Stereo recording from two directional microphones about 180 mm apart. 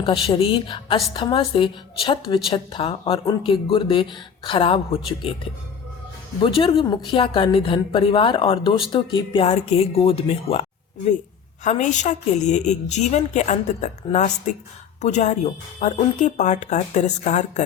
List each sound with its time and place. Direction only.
0.0 s speech: 30° left (ahead or behind)
6.6 s a woman's voice: 30° left (ahead or behind)